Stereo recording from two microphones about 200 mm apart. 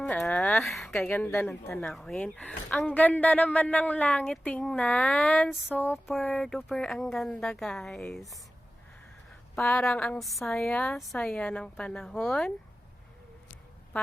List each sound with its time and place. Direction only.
0.0 s a woman's voice: 5° left (ahead or behind)
9.6 s a woman's voice: 5° left (ahead or behind)